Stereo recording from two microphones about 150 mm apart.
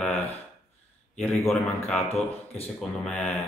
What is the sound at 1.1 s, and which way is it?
Speech, 5° left (ahead or behind).